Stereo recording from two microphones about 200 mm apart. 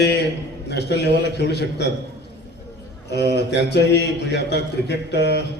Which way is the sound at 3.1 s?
60° left (ahead or behind).